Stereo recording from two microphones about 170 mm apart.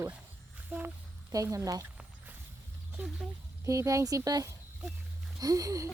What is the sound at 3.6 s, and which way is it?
Speech, 20° right (ahead or behind).